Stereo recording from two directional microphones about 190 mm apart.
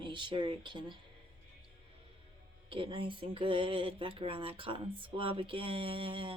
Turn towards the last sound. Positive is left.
turn(degrees=-25)  # may be behind; listen again after turning